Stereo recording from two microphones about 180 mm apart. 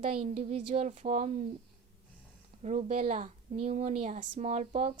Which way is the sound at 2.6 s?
35° right (ahead or behind).